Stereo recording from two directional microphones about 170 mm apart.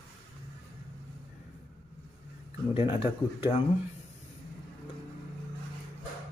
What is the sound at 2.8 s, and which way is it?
Speech, 30° left (ahead or behind).